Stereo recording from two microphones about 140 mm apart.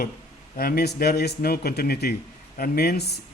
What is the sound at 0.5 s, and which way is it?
A man's voice, 90° left.